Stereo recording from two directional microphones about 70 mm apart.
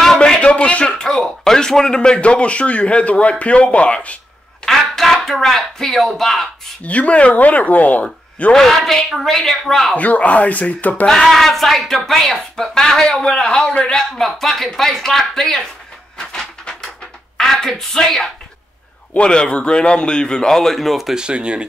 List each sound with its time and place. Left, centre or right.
0.0 s a sound: centre
0.4 s speech: centre
4.6 s speech: centre
6.8 s speech: centre
8.5 s speech: centre
9.9 s speech: left
11.1 s speech: centre
16.2 s a sound: centre
17.4 s speech: centre